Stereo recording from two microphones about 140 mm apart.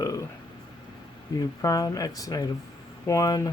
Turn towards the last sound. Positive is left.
turn(degrees=25)  # may be behind; listen again after turning